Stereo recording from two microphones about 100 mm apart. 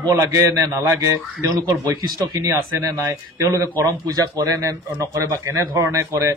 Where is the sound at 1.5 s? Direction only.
40° right (ahead or behind).